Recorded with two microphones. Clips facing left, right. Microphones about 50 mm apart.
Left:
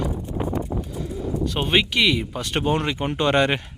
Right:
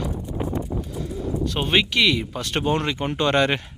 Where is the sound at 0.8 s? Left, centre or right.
Centre.